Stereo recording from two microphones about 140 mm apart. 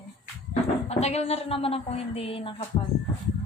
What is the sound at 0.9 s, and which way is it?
A woman's voice, 50° left (ahead or behind).